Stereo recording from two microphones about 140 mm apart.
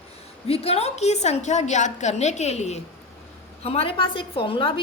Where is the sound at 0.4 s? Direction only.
45° left (ahead or behind).